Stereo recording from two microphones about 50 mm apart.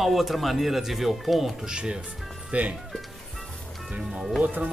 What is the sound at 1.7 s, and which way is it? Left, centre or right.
Speech, centre.